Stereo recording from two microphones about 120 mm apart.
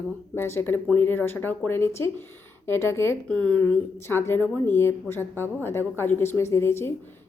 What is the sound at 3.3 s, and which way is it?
Speech, 10° left (ahead or behind).